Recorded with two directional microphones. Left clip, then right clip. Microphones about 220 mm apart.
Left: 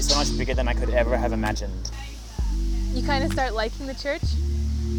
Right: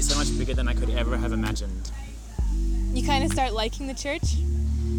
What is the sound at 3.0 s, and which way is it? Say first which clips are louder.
Speech: even; 45° right (ahead or behind).